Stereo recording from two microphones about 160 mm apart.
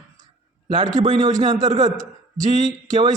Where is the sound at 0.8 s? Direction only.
25° right (ahead or behind).